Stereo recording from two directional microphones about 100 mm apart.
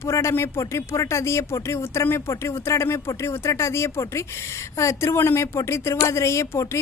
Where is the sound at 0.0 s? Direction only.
30° left (ahead or behind).